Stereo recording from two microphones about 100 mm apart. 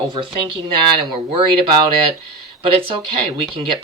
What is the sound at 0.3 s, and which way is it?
Speech, 55° right (ahead or behind).